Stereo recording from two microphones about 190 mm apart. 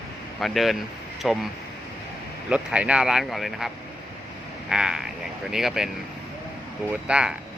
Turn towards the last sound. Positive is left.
turn(degrees=-5)  # may be behind; listen again after turning